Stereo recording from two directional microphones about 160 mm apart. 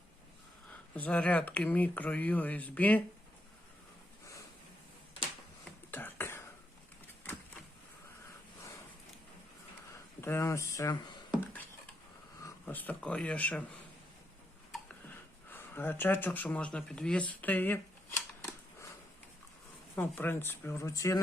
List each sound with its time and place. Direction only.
0.9 s speech: 10° left (ahead or behind)
5.9 s a sound: 15° left (ahead or behind)
10.2 s speech: 15° left (ahead or behind)
12.6 s speech: 10° left (ahead or behind)
15.4 s speech: 10° left (ahead or behind)
20.0 s speech: 10° left (ahead or behind)